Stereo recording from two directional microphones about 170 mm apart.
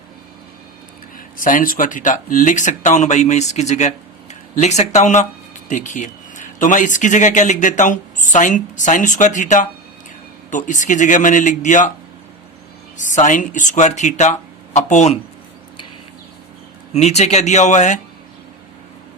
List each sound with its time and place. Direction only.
1.4 s speech: 55° left (ahead or behind)
13.0 s speech: 50° left (ahead or behind)
16.9 s speech: 40° left (ahead or behind)